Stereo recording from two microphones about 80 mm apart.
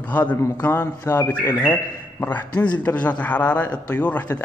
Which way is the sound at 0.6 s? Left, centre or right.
Left.